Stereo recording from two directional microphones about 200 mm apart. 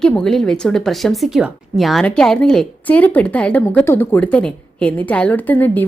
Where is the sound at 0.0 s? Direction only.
Centre (ahead or behind).